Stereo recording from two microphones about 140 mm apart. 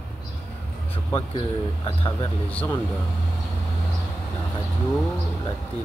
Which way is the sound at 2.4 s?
10° left (ahead or behind).